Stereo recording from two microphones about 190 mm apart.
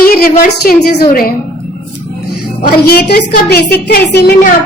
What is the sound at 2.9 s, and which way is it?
A woman's voice, 55° left (ahead or behind).